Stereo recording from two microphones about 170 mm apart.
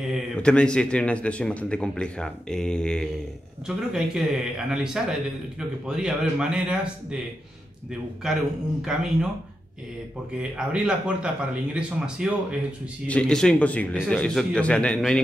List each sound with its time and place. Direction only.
0.1 s a man's voice: 5° left (ahead or behind)
8.8 s a man's voice: 5° right (ahead or behind)
10.4 s speech: 5° right (ahead or behind)
13.1 s a man's voice: 5° left (ahead or behind)